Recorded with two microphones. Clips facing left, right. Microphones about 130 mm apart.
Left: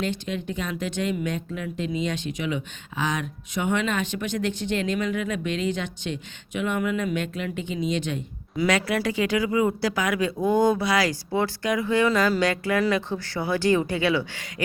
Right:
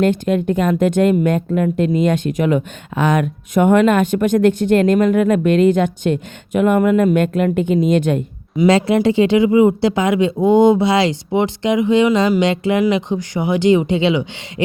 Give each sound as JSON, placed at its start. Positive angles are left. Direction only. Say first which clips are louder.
{"t": 0.0, "sound": "speech", "louder": "right 13 dB", "side_deg": -50}
{"t": 8.5, "sound": "speech", "louder": "right 10 dB", "side_deg": -25}